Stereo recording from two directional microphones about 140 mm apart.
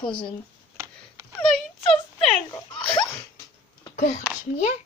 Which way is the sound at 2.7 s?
5° left (ahead or behind).